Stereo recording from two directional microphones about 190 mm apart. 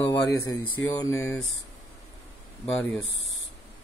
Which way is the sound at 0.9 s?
15° left (ahead or behind).